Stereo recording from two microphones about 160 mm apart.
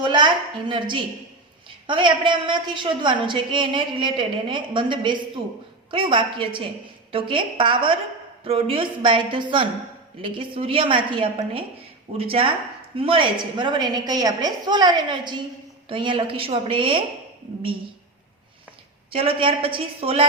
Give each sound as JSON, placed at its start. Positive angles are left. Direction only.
{"t": 0.0, "sound": "a sound", "side_deg": -30}
{"t": 0.7, "sound": "a woman's voice", "side_deg": -30}
{"t": 19.1, "sound": "a woman's voice", "side_deg": -35}